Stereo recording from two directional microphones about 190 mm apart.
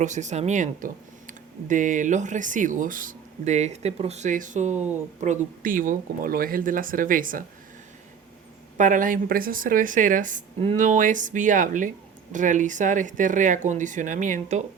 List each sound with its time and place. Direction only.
0.0 s speech: 40° right (ahead or behind)
8.8 s speech: 45° right (ahead or behind)